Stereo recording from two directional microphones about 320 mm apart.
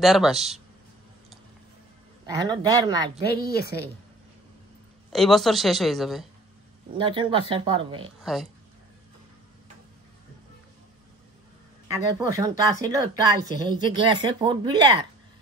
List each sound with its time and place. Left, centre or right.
0.0 s a man's voice: centre
2.2 s speech: centre
3.3 s a woman's voice: left
5.1 s a man's voice: centre
7.0 s speech: centre
8.2 s speech: centre
11.9 s speech: centre